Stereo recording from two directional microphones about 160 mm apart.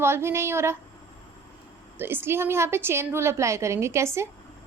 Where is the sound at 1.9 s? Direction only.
15° right (ahead or behind).